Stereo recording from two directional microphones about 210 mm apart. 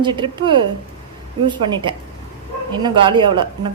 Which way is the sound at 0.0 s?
20° right (ahead or behind).